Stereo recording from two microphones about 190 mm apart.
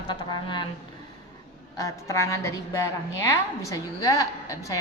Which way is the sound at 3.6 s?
15° left (ahead or behind).